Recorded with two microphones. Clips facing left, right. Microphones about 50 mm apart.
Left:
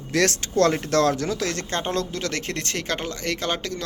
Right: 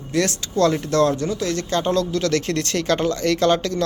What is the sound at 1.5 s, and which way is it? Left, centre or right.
Speech, left.